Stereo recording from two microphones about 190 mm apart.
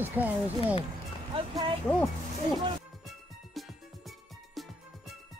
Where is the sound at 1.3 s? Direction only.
30° right (ahead or behind).